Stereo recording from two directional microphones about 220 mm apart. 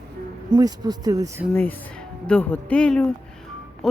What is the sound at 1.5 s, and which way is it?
Speech, 5° left (ahead or behind).